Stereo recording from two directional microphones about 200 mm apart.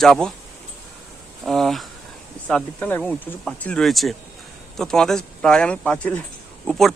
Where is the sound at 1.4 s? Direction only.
Centre (ahead or behind).